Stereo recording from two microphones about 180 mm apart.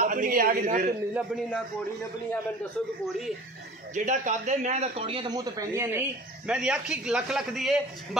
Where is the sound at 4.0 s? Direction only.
45° right (ahead or behind).